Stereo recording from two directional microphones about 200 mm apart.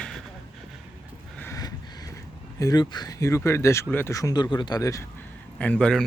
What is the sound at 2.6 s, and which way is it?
Speech, 20° left (ahead or behind).